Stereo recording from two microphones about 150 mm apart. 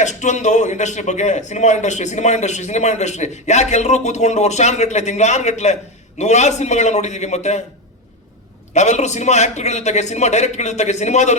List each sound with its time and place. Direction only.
0.0 s a man's voice: 50° left (ahead or behind)
8.7 s a man's voice: 50° left (ahead or behind)